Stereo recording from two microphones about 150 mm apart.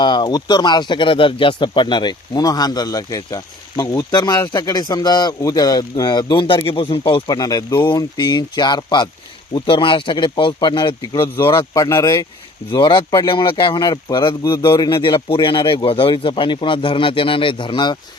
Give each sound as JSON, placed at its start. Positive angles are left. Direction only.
{"t": 0.0, "sound": "speech", "side_deg": 30}